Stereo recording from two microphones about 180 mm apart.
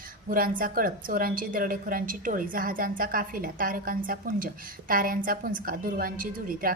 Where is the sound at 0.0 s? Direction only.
50° right (ahead or behind).